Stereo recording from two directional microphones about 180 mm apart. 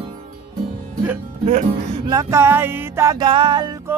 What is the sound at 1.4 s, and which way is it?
Speech, 35° right (ahead or behind).